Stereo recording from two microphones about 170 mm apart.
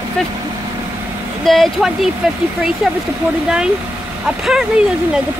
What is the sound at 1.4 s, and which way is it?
Speech, centre (ahead or behind).